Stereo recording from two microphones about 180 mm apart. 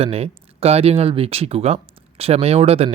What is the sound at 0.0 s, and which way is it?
Speech, 35° right (ahead or behind).